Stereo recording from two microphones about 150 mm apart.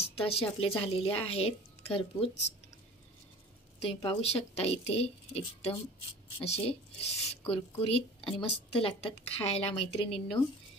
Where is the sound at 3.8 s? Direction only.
40° left (ahead or behind).